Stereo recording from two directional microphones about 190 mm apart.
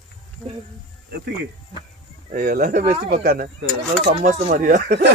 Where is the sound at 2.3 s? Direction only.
50° right (ahead or behind).